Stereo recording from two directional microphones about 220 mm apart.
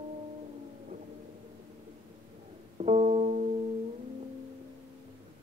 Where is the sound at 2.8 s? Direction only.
30° right (ahead or behind).